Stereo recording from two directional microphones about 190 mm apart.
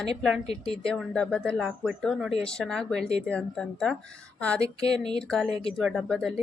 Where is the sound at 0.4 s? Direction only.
30° left (ahead or behind).